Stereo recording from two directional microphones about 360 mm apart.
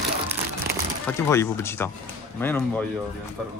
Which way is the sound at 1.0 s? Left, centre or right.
Centre.